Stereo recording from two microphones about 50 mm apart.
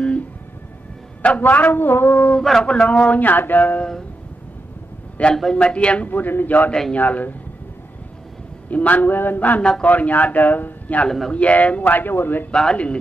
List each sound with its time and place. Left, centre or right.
1.4 s speech: left
2.6 s speech: left
5.3 s a man's voice: centre
5.6 s speech: left
6.0 s speech: left
8.6 s speech: left
9.6 s speech: centre
9.8 s speech: left
11.1 s a man's voice: centre
11.3 s speech: left
12.4 s a man's voice: centre